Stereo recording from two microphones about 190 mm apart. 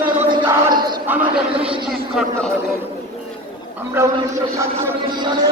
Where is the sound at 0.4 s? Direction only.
15° right (ahead or behind).